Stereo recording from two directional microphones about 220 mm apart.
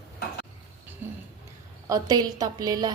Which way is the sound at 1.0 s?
10° right (ahead or behind).